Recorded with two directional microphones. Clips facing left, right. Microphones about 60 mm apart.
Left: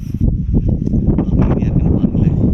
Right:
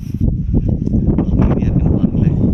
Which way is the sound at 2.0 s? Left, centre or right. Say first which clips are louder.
Even; centre.